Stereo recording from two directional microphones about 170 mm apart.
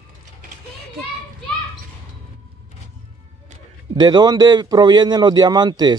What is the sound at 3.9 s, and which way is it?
A man's voice, 25° right (ahead or behind).